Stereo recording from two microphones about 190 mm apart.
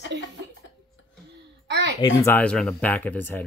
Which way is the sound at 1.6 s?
65° right (ahead or behind).